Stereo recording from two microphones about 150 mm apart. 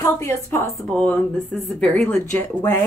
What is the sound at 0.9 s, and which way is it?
Speech, 5° left (ahead or behind).